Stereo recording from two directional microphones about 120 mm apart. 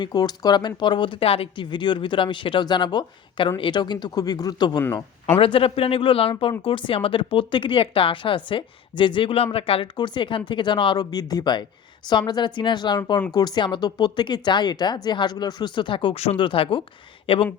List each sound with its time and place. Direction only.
0.0 s speech: 35° left (ahead or behind)
5.4 s speech: 50° left (ahead or behind)